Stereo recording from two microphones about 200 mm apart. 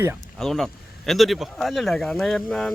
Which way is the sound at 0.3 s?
Centre (ahead or behind).